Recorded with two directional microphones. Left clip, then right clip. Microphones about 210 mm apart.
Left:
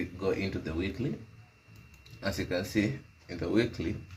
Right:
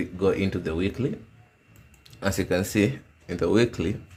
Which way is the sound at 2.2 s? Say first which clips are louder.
Right 7 dB; 60° right (ahead or behind).